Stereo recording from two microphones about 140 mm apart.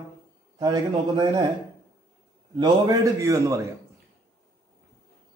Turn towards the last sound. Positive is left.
turn(degrees=-25)  # may be behind; listen again after turning